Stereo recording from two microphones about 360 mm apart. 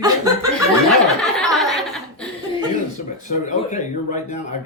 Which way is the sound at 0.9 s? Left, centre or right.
Centre.